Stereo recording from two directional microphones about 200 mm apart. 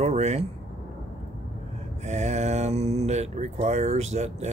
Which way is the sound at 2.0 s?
35° right (ahead or behind).